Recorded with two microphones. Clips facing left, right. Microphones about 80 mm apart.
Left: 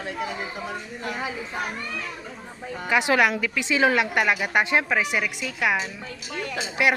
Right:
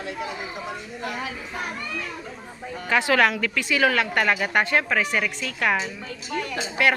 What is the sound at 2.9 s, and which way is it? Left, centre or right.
Speech, centre.